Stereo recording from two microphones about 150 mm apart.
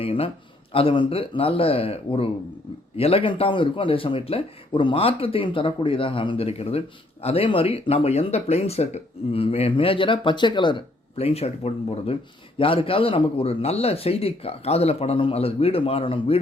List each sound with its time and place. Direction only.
0.0 s speech: 40° left (ahead or behind)